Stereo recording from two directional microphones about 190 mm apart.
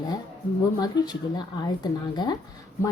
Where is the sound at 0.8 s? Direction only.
20° left (ahead or behind).